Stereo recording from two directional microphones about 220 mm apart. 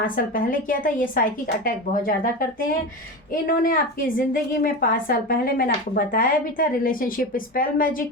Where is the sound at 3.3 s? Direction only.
40° left (ahead or behind).